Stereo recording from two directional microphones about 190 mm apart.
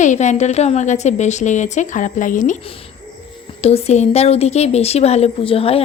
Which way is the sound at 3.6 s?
35° left (ahead or behind).